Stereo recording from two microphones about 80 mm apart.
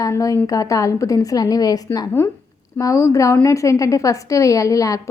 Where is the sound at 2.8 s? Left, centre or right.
Left.